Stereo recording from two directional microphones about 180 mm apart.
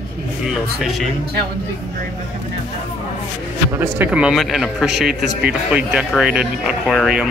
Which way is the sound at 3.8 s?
10° right (ahead or behind).